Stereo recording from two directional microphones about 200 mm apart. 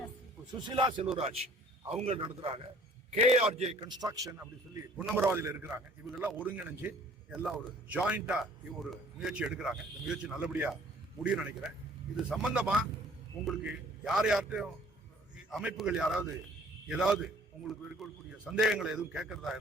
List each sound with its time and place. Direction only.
0.6 s a man's voice: 20° right (ahead or behind)
4.9 s a man's voice: centre (ahead or behind)